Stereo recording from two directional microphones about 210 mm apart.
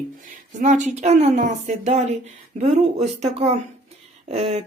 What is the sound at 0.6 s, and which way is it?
Speech, 35° right (ahead or behind).